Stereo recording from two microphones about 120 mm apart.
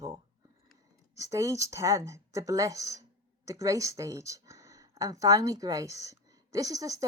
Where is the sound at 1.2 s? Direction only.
25° right (ahead or behind).